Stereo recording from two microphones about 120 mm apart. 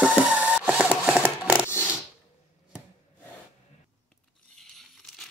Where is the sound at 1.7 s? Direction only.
20° left (ahead or behind).